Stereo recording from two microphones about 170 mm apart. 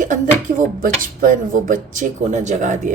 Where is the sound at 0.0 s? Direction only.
50° right (ahead or behind).